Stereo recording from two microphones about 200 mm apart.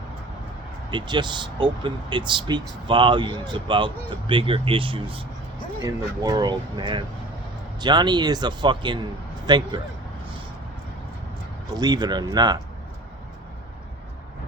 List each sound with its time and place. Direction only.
0.9 s speech: 20° right (ahead or behind)
11.7 s speech: 20° right (ahead or behind)